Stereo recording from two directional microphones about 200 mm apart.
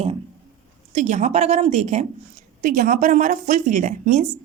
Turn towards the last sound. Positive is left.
turn(degrees=-40)  # may be behind; listen again after turning